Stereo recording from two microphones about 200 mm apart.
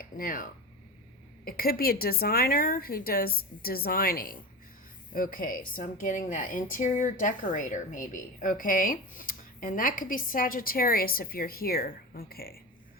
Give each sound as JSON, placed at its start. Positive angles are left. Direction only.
{"t": 0.2, "sound": "a woman's voice", "side_deg": 45}
{"t": 1.5, "sound": "a woman's voice", "side_deg": 45}